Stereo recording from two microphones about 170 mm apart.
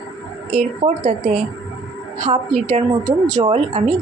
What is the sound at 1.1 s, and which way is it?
A woman's voice, 55° right (ahead or behind).